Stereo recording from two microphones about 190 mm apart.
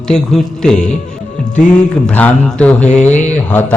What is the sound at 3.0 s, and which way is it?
Speech, 40° left (ahead or behind).